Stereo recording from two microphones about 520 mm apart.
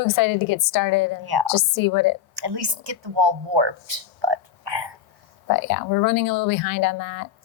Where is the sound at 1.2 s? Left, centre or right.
Right.